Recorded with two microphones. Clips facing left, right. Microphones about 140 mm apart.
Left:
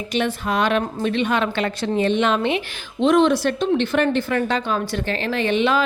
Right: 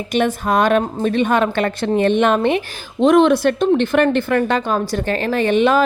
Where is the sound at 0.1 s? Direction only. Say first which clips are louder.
Right 5 dB; 45° right (ahead or behind).